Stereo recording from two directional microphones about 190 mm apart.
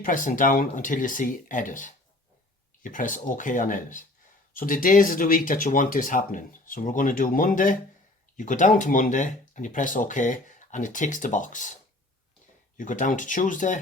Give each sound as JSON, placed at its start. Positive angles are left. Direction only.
{"t": 0.0, "sound": "speech", "side_deg": 45}
{"t": 12.7, "sound": "speech", "side_deg": 45}